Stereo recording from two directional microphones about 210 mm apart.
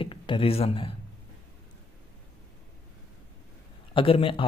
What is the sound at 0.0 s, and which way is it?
Speech, 25° left (ahead or behind).